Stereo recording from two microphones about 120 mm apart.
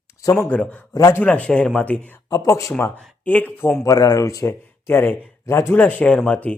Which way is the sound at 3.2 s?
15° left (ahead or behind).